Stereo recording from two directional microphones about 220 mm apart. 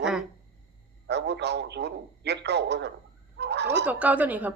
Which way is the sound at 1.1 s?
50° right (ahead or behind).